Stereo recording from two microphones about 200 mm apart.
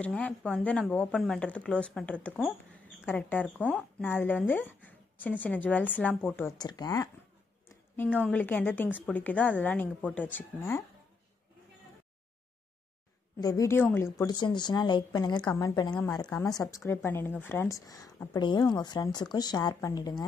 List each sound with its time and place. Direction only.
0.0 s a woman's voice: 5° left (ahead or behind)
6.6 s a woman's voice: 20° left (ahead or behind)
13.4 s speech: 15° left (ahead or behind)